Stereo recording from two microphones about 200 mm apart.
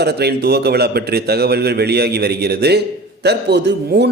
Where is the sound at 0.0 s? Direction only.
55° right (ahead or behind).